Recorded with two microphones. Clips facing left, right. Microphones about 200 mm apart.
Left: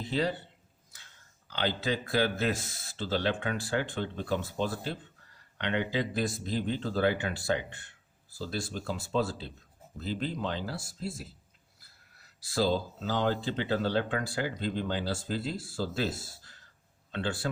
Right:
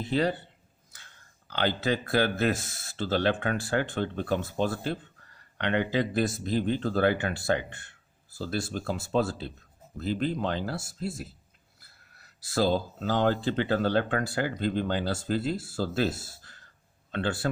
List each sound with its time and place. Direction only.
0.0 s speech: 60° right (ahead or behind)
1.5 s speech: 55° right (ahead or behind)